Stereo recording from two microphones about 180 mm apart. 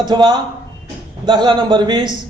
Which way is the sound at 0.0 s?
25° right (ahead or behind).